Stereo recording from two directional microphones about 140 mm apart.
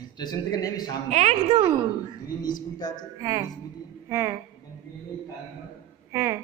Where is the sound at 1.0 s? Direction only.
55° right (ahead or behind).